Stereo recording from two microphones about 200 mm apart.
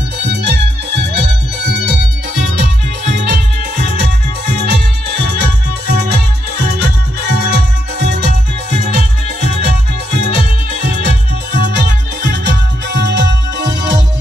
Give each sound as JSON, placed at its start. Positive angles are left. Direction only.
{"t": 0.2, "sound": "music", "side_deg": -55}
{"t": 3.7, "sound": "music", "side_deg": -55}